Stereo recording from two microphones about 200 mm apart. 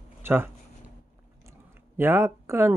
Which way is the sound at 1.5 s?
10° right (ahead or behind).